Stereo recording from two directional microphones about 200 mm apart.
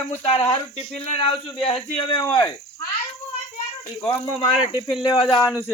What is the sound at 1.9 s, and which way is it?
Speech, 20° left (ahead or behind).